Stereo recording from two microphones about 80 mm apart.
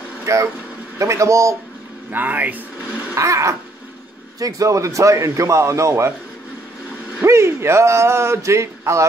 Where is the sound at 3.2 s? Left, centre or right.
Right.